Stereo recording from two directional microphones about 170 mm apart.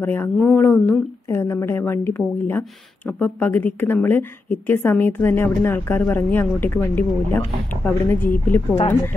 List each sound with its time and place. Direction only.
0.0 s a woman's voice: 10° left (ahead or behind)